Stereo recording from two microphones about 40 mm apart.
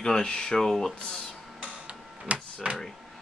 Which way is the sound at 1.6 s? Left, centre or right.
Right.